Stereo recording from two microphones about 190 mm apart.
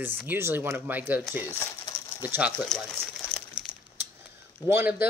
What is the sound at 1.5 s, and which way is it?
Bird, 15° left (ahead or behind).